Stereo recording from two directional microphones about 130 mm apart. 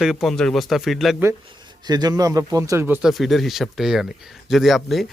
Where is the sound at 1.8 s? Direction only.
30° right (ahead or behind).